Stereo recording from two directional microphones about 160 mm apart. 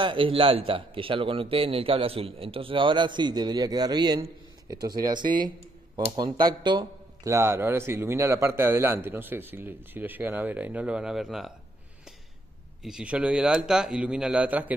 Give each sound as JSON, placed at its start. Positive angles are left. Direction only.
{"t": 0.0, "sound": "a man's voice", "side_deg": -30}
{"t": 7.3, "sound": "a man's voice", "side_deg": -15}
{"t": 12.8, "sound": "a man's voice", "side_deg": -5}